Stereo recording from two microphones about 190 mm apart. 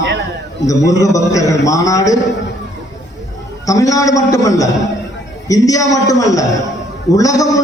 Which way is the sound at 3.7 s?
15° left (ahead or behind).